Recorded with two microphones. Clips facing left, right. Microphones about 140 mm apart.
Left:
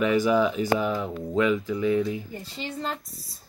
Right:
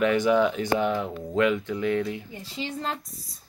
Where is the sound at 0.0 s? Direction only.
5° left (ahead or behind).